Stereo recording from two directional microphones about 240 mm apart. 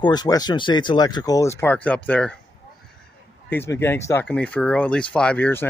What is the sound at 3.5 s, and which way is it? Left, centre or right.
Speech, centre.